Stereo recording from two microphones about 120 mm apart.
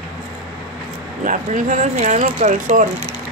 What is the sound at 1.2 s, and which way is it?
Speech, 90° right.